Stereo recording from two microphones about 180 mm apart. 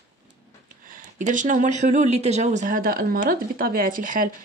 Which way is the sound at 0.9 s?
45° right (ahead or behind).